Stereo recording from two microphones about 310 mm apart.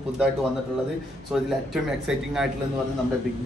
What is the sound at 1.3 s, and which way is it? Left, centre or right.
A man's voice, centre.